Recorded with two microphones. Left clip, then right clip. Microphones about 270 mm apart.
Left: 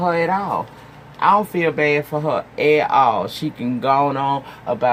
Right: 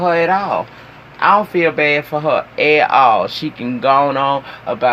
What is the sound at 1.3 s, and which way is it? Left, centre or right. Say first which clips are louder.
Speech: right 4 dB; left.